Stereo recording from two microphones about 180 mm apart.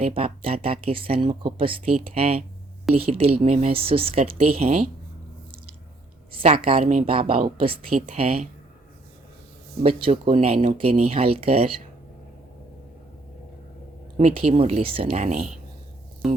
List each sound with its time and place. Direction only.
0.0 s speech: 30° right (ahead or behind)
6.3 s speech: 30° right (ahead or behind)
9.8 s speech: 30° right (ahead or behind)
14.2 s speech: 35° right (ahead or behind)
16.2 s speech: centre (ahead or behind)